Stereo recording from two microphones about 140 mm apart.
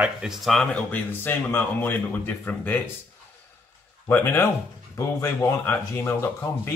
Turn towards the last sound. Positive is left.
turn(degrees=20)  # may be behind; listen again after turning